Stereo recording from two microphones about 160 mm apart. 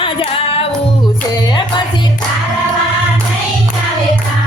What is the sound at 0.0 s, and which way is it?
Music, 35° left (ahead or behind).